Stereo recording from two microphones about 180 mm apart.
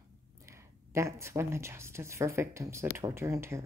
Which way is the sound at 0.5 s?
15° right (ahead or behind).